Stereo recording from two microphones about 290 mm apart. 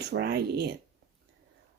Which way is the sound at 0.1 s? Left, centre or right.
Right.